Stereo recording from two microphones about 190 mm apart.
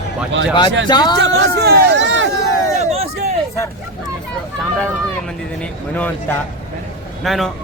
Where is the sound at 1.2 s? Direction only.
65° right (ahead or behind).